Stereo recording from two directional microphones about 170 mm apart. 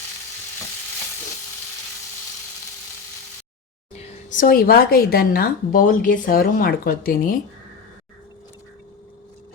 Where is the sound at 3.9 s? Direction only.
50° left (ahead or behind).